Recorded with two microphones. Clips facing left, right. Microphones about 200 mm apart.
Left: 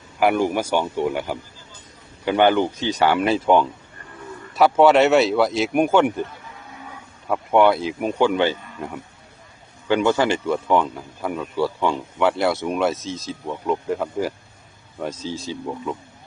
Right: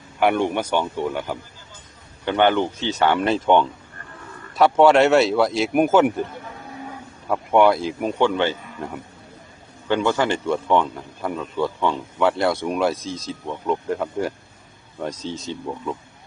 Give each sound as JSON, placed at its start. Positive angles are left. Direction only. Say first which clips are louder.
{"t": 0.2, "sound": "speech", "louder": "left 1 dB", "side_deg": 5}
{"t": 7.3, "sound": "speech", "louder": "even", "side_deg": 0}
{"t": 8.3, "sound": "speech", "louder": "left 2 dB", "side_deg": 15}
{"t": 9.9, "sound": "speech", "louder": "left 2 dB", "side_deg": 15}
{"t": 10.4, "sound": "speech", "louder": "even", "side_deg": 5}